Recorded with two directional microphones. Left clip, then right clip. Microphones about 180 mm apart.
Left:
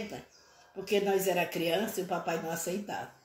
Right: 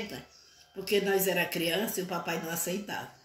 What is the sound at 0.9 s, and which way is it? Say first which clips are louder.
Speech: right 1 dB; centre (ahead or behind).